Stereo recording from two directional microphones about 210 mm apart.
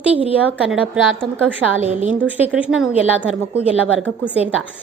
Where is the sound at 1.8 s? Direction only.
30° right (ahead or behind).